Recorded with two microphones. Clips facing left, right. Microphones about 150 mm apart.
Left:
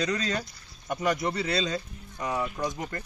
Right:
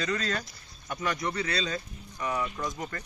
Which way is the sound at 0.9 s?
25° left (ahead or behind).